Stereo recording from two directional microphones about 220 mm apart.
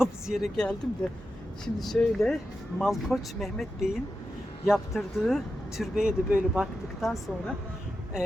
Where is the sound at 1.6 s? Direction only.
Centre (ahead or behind).